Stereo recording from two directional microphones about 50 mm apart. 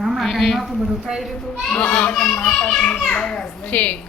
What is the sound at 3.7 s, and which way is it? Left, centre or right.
Speech, left.